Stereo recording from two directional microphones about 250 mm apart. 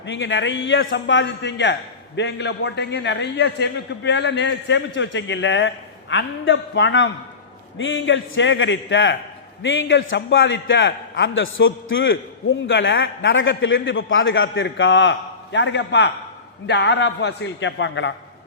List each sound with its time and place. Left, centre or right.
0.0 s a man's voice: left